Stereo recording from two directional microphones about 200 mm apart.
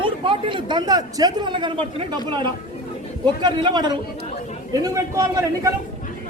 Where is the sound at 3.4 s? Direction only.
20° right (ahead or behind).